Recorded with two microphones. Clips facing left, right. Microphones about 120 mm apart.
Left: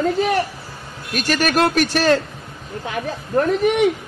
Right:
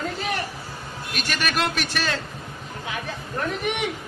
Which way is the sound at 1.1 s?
40° left (ahead or behind).